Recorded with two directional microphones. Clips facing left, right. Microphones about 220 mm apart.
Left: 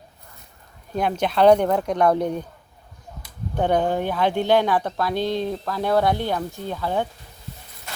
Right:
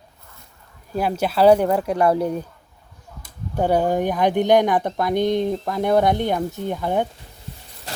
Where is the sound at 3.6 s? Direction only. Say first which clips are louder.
Right 2 dB; 10° right (ahead or behind).